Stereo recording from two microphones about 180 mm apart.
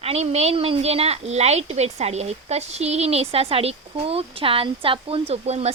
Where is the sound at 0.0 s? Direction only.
35° right (ahead or behind).